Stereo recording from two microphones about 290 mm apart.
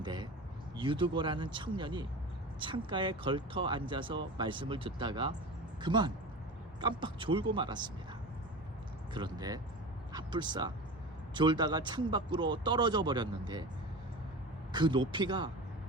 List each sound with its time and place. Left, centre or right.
0.0 s a sound: centre
0.8 s speech: centre
9.1 s speech: centre
10.1 s a sound: centre
11.3 s speech: centre
14.7 s speech: centre